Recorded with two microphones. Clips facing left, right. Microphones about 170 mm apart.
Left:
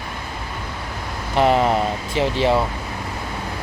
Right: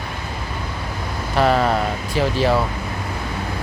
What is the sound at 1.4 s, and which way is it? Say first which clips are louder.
Speech: left 1 dB; 20° left (ahead or behind).